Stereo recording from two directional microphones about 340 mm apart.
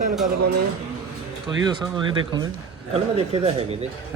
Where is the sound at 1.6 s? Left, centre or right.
Centre.